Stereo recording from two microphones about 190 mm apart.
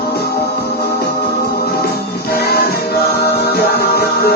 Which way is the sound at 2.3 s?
55° left (ahead or behind).